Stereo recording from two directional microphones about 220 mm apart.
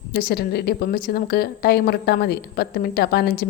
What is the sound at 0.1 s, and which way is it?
Speech, 40° left (ahead or behind).